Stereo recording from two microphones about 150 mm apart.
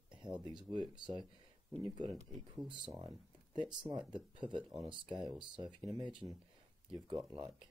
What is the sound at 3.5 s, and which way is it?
Speech, 30° right (ahead or behind).